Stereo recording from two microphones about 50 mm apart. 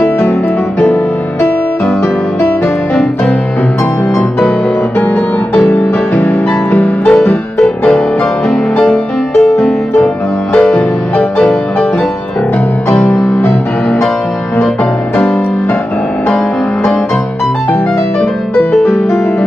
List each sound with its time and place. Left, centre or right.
5.8 s music: left
6.8 s music: left
10.6 s music: left
12.9 s music: left